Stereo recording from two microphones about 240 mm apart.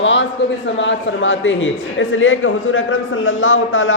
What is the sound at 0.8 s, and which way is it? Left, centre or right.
Speech, left.